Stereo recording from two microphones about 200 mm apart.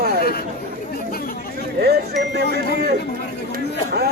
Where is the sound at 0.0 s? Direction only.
50° right (ahead or behind).